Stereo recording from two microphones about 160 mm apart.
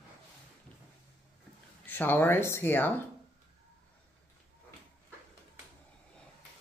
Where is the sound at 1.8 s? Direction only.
10° left (ahead or behind).